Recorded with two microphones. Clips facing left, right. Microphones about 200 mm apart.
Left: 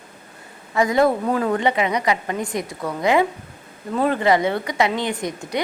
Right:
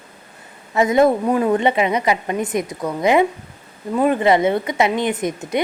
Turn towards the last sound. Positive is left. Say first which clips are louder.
# right 4 dB
turn(degrees=-20)  # may be behind; listen again after turning